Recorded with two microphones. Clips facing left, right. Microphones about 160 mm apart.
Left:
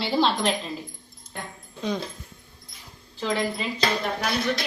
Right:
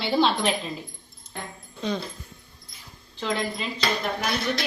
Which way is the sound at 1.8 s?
10° left (ahead or behind).